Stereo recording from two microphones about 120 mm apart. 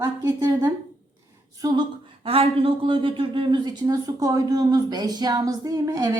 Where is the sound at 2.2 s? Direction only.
50° right (ahead or behind).